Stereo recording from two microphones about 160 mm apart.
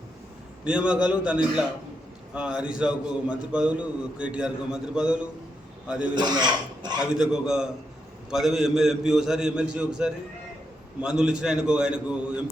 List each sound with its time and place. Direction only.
0.6 s a man's voice: 5° right (ahead or behind)
6.1 s speech: 25° right (ahead or behind)
7.2 s a man's voice: 5° right (ahead or behind)